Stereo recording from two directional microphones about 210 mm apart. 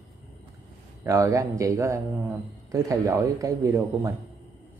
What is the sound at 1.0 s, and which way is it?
Speech, 15° right (ahead or behind).